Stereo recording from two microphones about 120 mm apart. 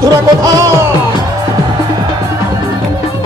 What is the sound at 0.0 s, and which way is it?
Speech, 30° right (ahead or behind).